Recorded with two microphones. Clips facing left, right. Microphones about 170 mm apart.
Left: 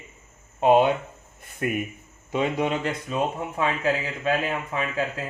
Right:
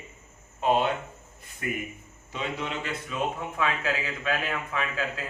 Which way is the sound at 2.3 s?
55° left (ahead or behind).